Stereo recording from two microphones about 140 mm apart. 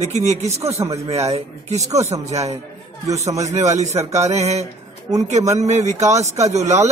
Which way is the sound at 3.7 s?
50° right (ahead or behind).